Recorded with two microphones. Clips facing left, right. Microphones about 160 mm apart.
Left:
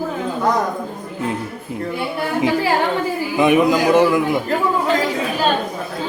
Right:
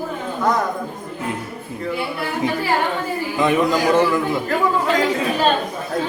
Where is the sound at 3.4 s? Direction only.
15° left (ahead or behind).